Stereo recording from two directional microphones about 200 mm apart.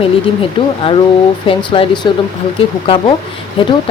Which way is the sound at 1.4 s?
25° left (ahead or behind).